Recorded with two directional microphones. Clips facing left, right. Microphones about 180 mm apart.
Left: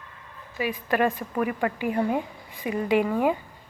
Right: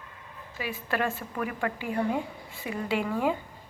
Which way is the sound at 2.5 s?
15° left (ahead or behind).